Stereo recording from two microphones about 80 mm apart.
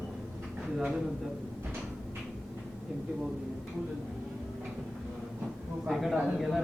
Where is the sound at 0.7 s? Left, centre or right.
Centre.